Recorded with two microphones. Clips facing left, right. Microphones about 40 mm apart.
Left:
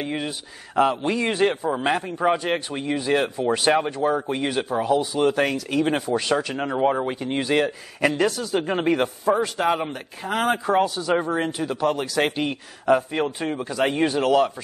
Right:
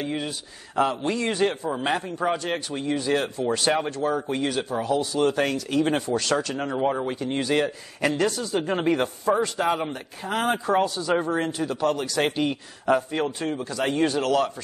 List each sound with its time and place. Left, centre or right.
0.0 s a man's voice: centre